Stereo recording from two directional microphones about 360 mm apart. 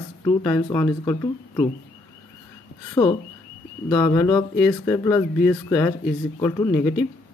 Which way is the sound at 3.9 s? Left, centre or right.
Centre.